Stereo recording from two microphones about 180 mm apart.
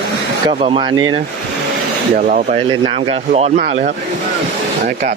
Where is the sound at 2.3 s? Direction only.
50° right (ahead or behind).